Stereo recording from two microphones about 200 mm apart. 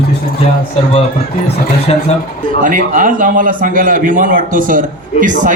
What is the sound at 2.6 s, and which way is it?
A man's voice, 40° right (ahead or behind).